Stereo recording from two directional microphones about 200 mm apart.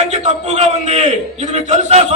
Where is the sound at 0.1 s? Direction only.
35° right (ahead or behind).